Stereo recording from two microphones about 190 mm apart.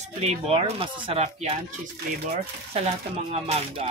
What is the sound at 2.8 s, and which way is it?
Speech, 35° right (ahead or behind).